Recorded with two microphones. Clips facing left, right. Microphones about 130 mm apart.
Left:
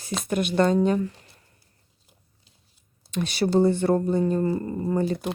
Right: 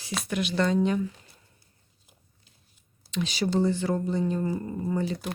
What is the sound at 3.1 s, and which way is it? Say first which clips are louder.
Speech: left 4 dB; 50° left (ahead or behind).